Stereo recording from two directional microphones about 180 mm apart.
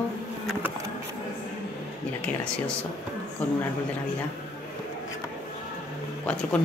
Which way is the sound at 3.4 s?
10° left (ahead or behind).